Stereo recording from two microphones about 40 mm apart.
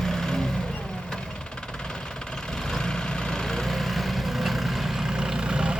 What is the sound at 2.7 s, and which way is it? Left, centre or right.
Vehicle, centre.